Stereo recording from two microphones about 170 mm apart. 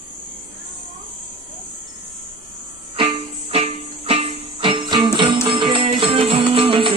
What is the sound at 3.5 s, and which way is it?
Music, 35° right (ahead or behind).